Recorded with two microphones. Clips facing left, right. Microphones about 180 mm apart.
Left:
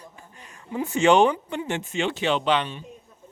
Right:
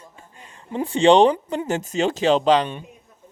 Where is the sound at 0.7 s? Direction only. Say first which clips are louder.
Right 4 dB; 30° right (ahead or behind).